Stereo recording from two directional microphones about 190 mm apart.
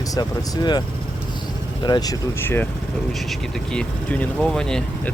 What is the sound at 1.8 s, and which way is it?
Speech, 20° left (ahead or behind).